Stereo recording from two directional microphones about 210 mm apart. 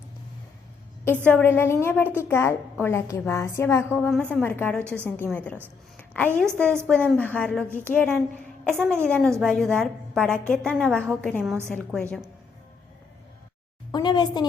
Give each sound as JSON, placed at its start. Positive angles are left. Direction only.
{"t": 1.0, "sound": "a woman's voice", "side_deg": 10}
{"t": 6.0, "sound": "a sound", "side_deg": 5}
{"t": 6.3, "sound": "a woman's voice", "side_deg": -10}
{"t": 6.8, "sound": "a woman's voice", "side_deg": 5}
{"t": 13.9, "sound": "a woman's voice", "side_deg": 20}